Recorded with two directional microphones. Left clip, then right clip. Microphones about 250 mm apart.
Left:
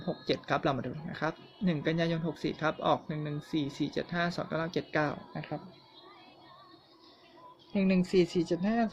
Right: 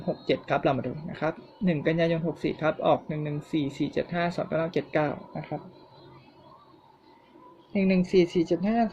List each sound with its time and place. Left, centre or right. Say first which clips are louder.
0.3 s speech: right 5 dB; centre
7.7 s speech: right 5 dB; left